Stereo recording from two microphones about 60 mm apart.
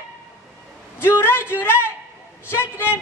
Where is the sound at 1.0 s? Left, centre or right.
Left.